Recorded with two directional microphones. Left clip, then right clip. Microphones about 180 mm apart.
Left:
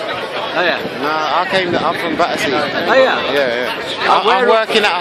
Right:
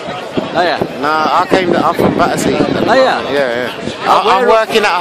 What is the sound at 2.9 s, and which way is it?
Speech, 55° right (ahead or behind).